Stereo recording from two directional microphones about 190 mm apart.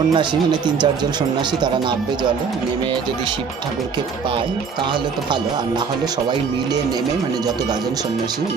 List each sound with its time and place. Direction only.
0.1 s speech: 25° right (ahead or behind)